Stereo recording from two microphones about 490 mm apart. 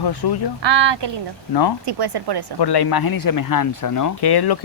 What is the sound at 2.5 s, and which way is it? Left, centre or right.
Speech, left.